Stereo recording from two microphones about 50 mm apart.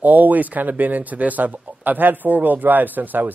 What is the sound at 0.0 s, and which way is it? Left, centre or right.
Speech, right.